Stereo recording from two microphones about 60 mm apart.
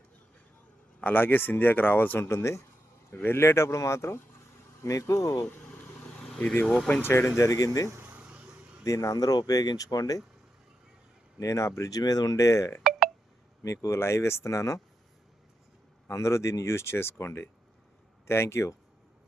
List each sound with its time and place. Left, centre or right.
1.0 s speech: left
4.8 s speech: left
6.4 s speech: left
11.3 s speech: left
16.0 s speech: left